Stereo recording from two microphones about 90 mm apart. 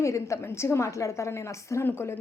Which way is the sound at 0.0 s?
35° left (ahead or behind).